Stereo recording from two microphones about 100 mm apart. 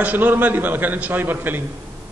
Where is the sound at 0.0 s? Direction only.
20° right (ahead or behind).